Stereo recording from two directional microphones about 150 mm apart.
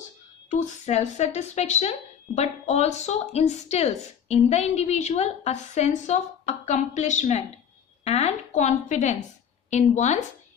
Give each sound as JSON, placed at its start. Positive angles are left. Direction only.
{"t": 0.5, "sound": "speech", "side_deg": 55}